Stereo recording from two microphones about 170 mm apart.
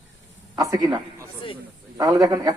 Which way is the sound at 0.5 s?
20° right (ahead or behind).